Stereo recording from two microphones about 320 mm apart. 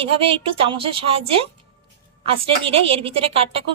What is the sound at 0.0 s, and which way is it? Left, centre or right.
A woman's voice, centre.